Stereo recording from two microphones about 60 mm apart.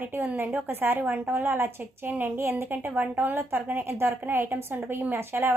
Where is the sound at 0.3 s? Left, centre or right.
Right.